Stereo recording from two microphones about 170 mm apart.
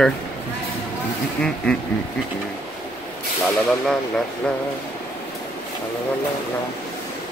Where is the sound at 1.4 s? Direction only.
5° left (ahead or behind).